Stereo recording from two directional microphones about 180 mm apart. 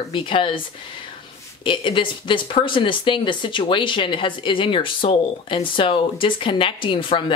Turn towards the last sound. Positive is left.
turn(degrees=30)  # may be behind; listen again after turning